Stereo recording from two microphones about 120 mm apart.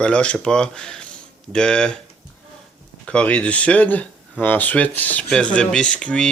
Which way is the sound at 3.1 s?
10° left (ahead or behind).